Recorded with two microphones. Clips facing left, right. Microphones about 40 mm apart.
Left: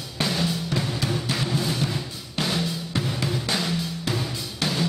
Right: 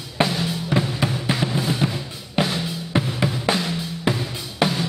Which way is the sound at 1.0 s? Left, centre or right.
Right.